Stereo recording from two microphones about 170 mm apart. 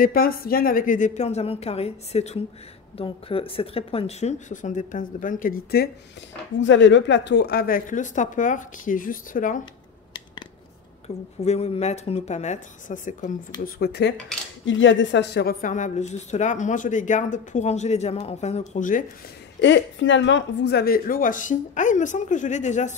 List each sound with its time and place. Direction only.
0.0 s speech: 60° left (ahead or behind)
6.6 s a woman's voice: 90° left; by 9.6 s 50° left (ahead or behind)
11.1 s speech: 40° left (ahead or behind)
13.7 s speech: 70° left (ahead or behind)
14.7 s a woman's voice: 90° left
15.6 s speech: 45° left (ahead or behind)
19.6 s speech: 90° left; by 22.9 s 45° left (ahead or behind)